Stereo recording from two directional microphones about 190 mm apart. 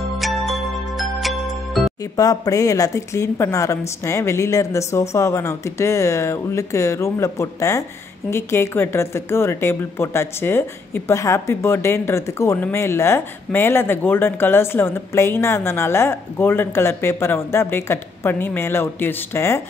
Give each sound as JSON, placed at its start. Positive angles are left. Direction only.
{"t": 0.2, "sound": "music", "side_deg": 0}
{"t": 2.1, "sound": "speech", "side_deg": 20}